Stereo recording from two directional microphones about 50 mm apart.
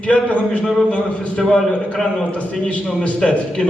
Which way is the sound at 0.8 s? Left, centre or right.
Left.